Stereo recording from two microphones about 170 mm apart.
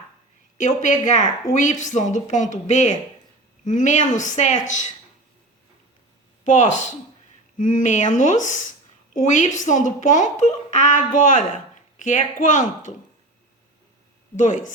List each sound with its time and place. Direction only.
0.6 s speech: 45° left (ahead or behind)
6.4 s speech: 45° left (ahead or behind)
14.3 s speech: 45° left (ahead or behind)